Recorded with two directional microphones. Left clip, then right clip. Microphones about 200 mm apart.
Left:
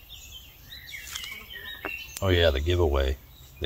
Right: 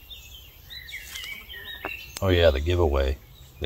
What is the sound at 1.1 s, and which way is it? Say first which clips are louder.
Insect: even; 15° left (ahead or behind).